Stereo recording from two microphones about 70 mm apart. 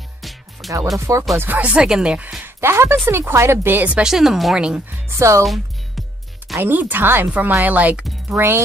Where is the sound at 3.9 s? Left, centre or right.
Centre.